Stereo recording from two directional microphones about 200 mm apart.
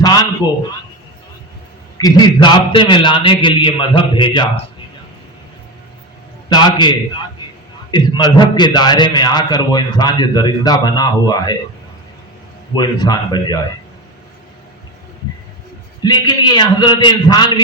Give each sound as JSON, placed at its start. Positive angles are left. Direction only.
{"t": 0.0, "sound": "a sound", "side_deg": 20}
{"t": 2.0, "sound": "a man's voice", "side_deg": 20}
{"t": 6.5, "sound": "a man's voice", "side_deg": 20}
{"t": 12.7, "sound": "a man's voice", "side_deg": 20}
{"t": 16.0, "sound": "a man's voice", "side_deg": 20}